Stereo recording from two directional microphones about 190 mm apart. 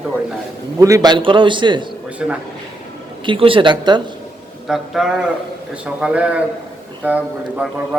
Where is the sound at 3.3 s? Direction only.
30° right (ahead or behind).